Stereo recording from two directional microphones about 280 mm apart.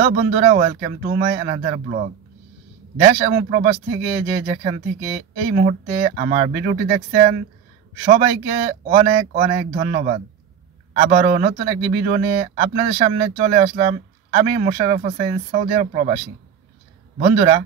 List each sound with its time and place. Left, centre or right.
0.0 s a man's voice: right
17.2 s a man's voice: right